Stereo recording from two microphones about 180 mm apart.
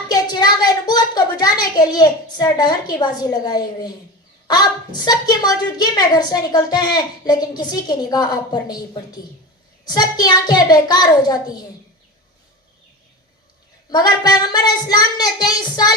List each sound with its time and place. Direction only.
0.1 s a sound: 20° left (ahead or behind)
1.7 s a woman's voice: 20° left (ahead or behind)
13.9 s a woman's voice: 20° left (ahead or behind)